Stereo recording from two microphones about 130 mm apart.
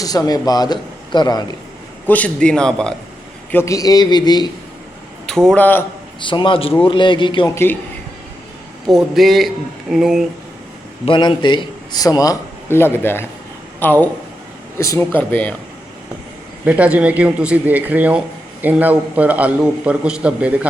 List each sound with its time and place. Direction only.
0.0 s speech: 30° left (ahead or behind)
2.0 s a man's voice: 10° left (ahead or behind)
3.5 s speech: 20° left (ahead or behind)
5.2 s a man's voice: 5° left (ahead or behind)
6.1 s speech: 40° left (ahead or behind)
7.4 s a man's voice: 20° left (ahead or behind)
8.9 s a man's voice: centre (ahead or behind)
11.0 s a man's voice: 40° left (ahead or behind); by 15.5 s 10° left (ahead or behind)
16.6 s a man's voice: 10° right (ahead or behind)